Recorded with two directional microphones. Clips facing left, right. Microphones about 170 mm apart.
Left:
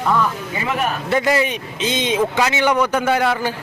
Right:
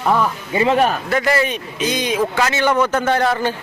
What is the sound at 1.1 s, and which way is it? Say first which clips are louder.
A man's voice: even; 20° left (ahead or behind).